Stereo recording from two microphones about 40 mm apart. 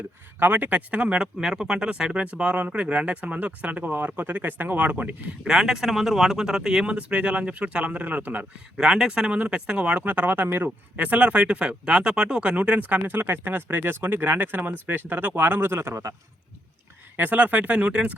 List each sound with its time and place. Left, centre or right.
0.3 s speech: right
1.2 s speech: centre; by 5.1 s right
5.5 s speech: centre
6.9 s speech: right
8.8 s speech: centre
10.0 s speech: right
12.8 s speech: right
17.2 s speech: right